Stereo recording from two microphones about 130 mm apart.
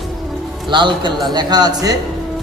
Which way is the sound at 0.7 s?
35° right (ahead or behind).